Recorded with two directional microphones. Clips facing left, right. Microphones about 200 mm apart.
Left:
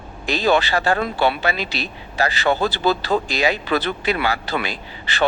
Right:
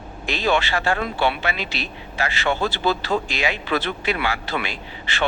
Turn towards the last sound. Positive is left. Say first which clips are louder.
# left 3 dB
turn(degrees=35)  # may be behind; listen again after turning